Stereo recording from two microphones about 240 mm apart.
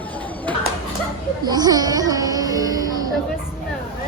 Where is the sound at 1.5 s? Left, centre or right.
Centre.